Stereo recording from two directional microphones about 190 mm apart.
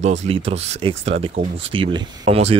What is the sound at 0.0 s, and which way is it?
Speech, 35° right (ahead or behind).